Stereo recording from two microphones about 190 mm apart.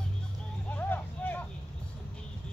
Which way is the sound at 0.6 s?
10° left (ahead or behind).